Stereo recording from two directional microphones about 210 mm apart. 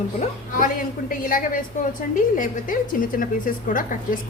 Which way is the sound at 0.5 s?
40° left (ahead or behind).